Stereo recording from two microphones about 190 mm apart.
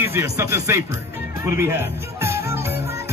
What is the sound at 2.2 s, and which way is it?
Music, 15° right (ahead or behind).